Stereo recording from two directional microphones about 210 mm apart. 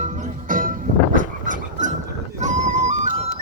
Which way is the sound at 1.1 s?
40° right (ahead or behind).